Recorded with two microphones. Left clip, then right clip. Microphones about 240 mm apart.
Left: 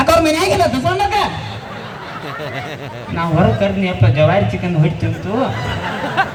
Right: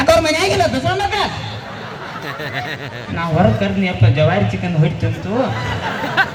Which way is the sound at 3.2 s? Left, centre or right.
Left.